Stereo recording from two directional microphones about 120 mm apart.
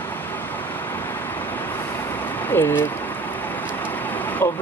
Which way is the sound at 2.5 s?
15° left (ahead or behind).